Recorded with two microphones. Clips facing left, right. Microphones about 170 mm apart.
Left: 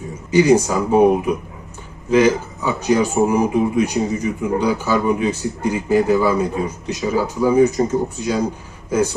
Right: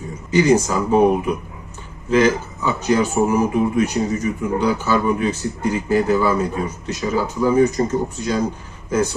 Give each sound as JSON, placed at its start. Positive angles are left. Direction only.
{"t": 0.3, "sound": "speech", "side_deg": 10}
{"t": 2.0, "sound": "speech", "side_deg": 10}